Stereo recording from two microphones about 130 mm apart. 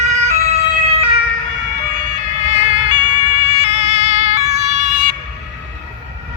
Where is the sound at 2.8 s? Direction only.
40° right (ahead or behind); by 5.1 s 90° right.